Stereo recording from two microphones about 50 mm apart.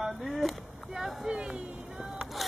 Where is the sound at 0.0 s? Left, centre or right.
Centre.